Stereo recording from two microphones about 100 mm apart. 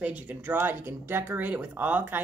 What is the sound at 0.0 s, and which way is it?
Speech, 15° right (ahead or behind).